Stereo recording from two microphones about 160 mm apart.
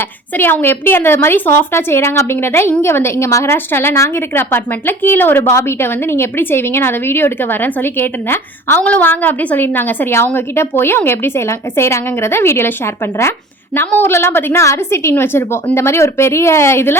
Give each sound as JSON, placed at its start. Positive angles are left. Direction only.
{"t": 0.3, "sound": "a woman's voice", "side_deg": 15}
{"t": 13.7, "sound": "a woman's voice", "side_deg": 15}